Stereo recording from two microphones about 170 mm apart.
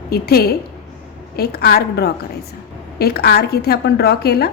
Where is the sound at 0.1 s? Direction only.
65° left (ahead or behind).